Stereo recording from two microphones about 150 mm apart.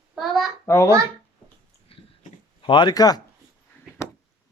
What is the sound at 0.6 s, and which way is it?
Speech, 20° left (ahead or behind).